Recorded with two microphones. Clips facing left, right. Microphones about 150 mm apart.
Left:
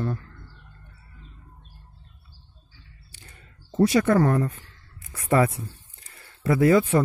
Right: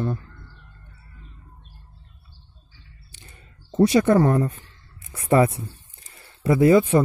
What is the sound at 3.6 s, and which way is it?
Speech, 20° right (ahead or behind).